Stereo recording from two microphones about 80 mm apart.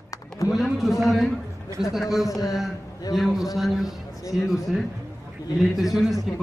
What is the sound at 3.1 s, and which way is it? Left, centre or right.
A man's voice, centre.